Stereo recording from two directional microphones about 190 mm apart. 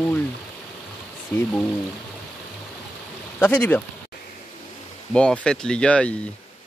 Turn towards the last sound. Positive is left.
turn(degrees=5)  # may be behind; listen again after turning